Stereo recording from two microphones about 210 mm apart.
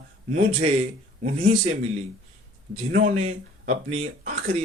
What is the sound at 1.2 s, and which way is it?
Speech, 35° right (ahead or behind).